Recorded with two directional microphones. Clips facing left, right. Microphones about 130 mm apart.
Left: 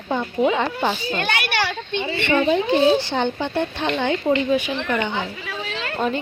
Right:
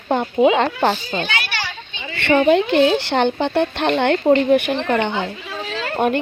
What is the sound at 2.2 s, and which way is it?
Speech, 65° right (ahead or behind).